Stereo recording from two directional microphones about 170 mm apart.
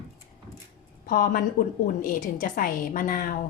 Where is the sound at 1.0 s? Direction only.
60° left (ahead or behind).